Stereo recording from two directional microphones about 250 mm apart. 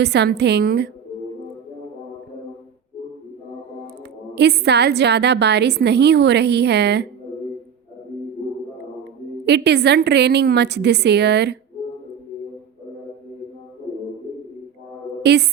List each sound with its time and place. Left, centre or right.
0.0 s a woman's voice: right
4.4 s a woman's voice: right
9.5 s a woman's voice: right
15.2 s a woman's voice: right